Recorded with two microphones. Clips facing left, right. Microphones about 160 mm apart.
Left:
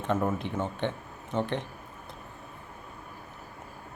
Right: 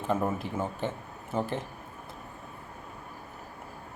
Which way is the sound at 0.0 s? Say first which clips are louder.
Left 1 dB; 5° right (ahead or behind).